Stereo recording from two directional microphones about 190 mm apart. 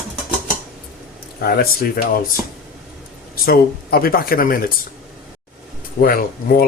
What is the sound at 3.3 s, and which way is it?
Speech, 55° left (ahead or behind).